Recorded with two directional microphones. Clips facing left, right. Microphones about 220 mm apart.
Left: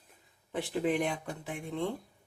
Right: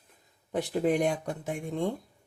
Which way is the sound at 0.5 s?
45° right (ahead or behind).